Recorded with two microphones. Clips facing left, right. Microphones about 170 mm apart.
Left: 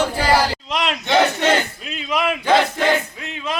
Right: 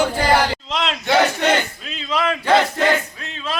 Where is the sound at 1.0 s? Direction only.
5° right (ahead or behind).